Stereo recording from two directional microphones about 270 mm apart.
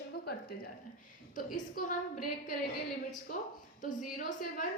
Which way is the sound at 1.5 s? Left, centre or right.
Left.